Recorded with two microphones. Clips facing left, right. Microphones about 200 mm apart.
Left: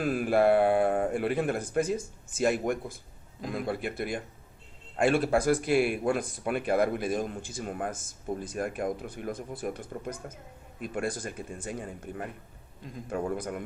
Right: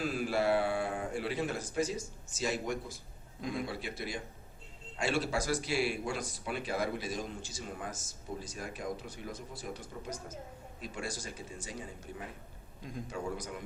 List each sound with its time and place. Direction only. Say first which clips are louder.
0.0 s a man's voice: left 7 dB; 55° left (ahead or behind)